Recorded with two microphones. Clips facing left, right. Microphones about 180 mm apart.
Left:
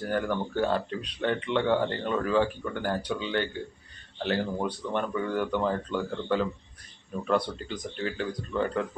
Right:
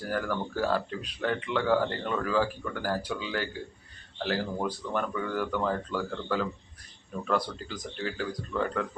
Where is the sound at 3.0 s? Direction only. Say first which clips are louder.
Left 3 dB; 5° right (ahead or behind).